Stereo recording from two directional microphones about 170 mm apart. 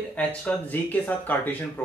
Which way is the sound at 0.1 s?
10° left (ahead or behind).